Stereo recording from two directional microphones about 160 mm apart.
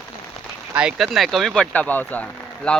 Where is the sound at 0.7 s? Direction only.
5° right (ahead or behind).